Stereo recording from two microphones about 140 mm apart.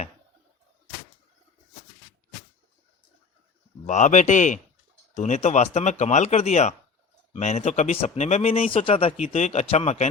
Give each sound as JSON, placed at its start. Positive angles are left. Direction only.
{"t": 3.8, "sound": "speech", "side_deg": 60}